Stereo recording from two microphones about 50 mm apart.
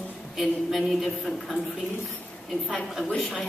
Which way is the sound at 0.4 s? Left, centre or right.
Centre.